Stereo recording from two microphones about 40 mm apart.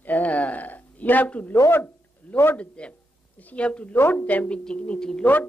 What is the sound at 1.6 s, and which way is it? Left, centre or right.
Speech, left.